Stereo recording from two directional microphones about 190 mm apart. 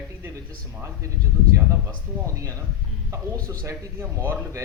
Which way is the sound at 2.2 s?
15° right (ahead or behind).